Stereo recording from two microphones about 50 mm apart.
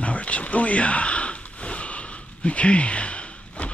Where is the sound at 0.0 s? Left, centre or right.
Left.